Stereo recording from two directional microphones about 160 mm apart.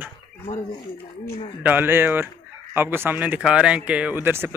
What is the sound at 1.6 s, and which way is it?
Speech, 10° right (ahead or behind).